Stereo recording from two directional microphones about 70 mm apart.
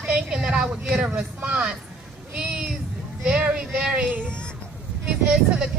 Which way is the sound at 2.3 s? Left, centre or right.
Centre.